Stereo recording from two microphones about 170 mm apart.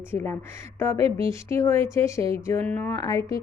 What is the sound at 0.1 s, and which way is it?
Speech, 15° left (ahead or behind).